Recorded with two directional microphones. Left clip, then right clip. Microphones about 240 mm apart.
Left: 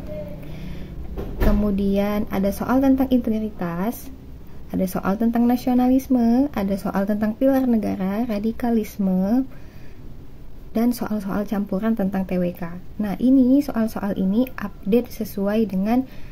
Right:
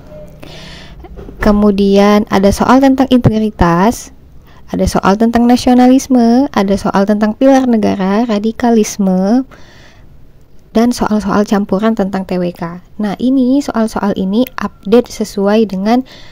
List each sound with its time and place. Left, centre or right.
0.5 s a sound: right
1.6 s speech: right
10.7 s speech: right